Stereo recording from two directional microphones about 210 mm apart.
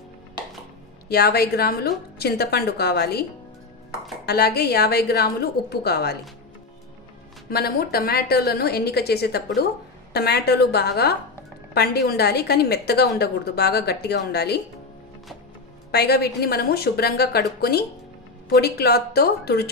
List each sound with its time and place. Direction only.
1.0 s a woman's voice: 50° left (ahead or behind)
4.3 s a woman's voice: 50° left (ahead or behind)
7.4 s a woman's voice: 45° left (ahead or behind)
15.9 s a woman's voice: 50° left (ahead or behind)